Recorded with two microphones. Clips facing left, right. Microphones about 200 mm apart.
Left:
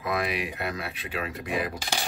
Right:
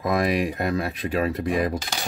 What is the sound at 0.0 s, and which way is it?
Speech, 40° right (ahead or behind).